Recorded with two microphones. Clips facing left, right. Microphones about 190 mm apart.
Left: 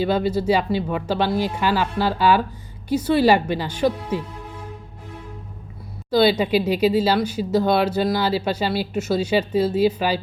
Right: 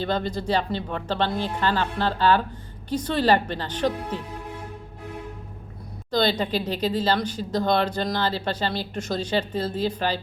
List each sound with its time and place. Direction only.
0.0 s speech: 10° left (ahead or behind)
6.1 s speech: 10° left (ahead or behind)